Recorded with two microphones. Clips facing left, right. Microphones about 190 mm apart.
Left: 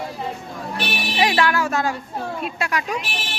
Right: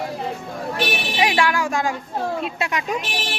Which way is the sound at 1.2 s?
10° right (ahead or behind).